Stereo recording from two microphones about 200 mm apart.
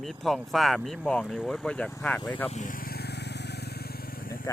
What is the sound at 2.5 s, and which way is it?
Vehicle, 40° left (ahead or behind).